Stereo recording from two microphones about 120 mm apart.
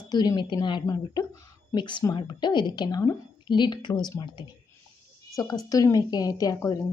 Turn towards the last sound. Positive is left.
turn(degrees=30)  # may be behind; listen again after turning